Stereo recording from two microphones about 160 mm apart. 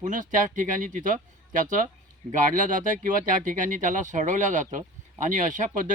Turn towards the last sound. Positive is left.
turn(degrees=-55)  # may be behind; listen again after turning